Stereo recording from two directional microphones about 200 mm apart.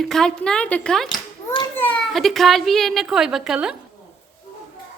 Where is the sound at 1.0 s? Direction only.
20° left (ahead or behind).